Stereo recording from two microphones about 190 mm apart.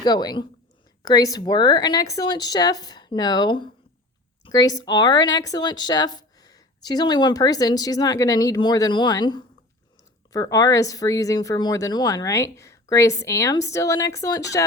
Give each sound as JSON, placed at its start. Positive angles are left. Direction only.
{"t": 0.0, "sound": "a woman's voice", "side_deg": 20}